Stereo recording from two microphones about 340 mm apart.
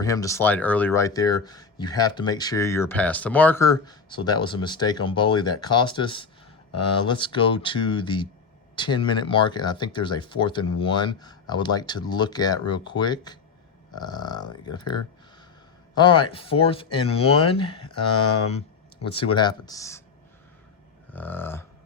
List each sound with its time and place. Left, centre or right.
0.0 s speech: centre
19.1 s speech: centre
21.1 s a sound: centre